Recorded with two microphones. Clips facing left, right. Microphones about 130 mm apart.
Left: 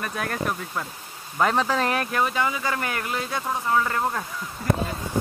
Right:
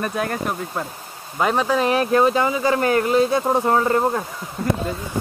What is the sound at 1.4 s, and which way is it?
Speech, 10° right (ahead or behind).